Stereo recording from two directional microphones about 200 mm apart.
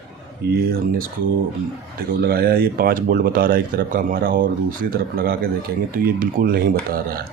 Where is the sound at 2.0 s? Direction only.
50° right (ahead or behind).